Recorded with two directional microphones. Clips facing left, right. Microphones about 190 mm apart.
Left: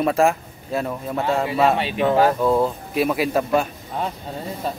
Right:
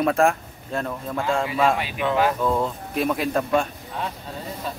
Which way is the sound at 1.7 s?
35° left (ahead or behind).